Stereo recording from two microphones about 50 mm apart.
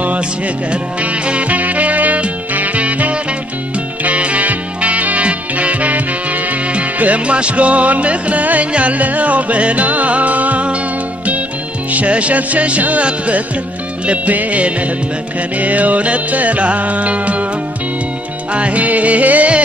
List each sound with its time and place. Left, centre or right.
0.7 s music: right
11.9 s music: right
18.5 s music: right